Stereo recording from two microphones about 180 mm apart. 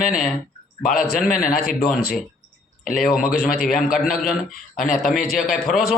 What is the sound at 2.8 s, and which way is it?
Speech, centre (ahead or behind).